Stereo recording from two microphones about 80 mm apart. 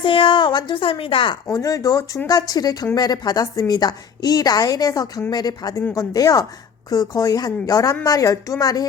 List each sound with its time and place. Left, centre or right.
0.0 s speech: left
1.5 s a woman's voice: left
5.9 s a woman's voice: left